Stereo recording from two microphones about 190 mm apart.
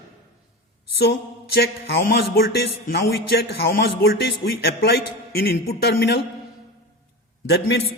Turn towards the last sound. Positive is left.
turn(degrees=60)  # may be behind; listen again after turning